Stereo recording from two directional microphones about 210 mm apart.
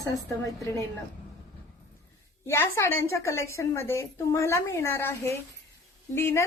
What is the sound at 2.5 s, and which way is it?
A woman's voice, 10° left (ahead or behind).